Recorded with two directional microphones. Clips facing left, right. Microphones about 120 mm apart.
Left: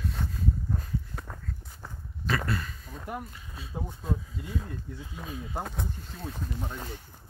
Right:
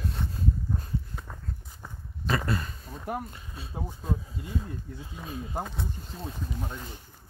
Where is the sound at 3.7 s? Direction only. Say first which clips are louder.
Even; 10° right (ahead or behind).